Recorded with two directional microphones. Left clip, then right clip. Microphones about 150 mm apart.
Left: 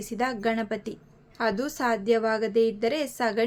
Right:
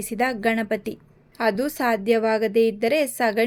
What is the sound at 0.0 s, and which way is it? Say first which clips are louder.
A woman's voice: right 5 dB; 30° right (ahead or behind).